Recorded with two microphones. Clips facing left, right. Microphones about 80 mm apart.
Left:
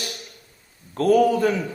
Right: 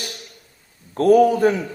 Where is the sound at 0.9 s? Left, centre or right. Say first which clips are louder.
Right 3 dB; right.